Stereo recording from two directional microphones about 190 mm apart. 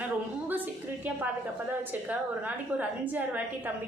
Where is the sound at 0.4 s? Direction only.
10° right (ahead or behind).